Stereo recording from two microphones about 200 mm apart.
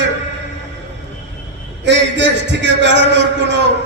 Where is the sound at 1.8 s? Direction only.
60° right (ahead or behind).